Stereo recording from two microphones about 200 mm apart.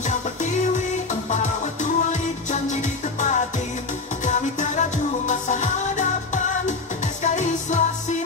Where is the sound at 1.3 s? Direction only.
40° left (ahead or behind).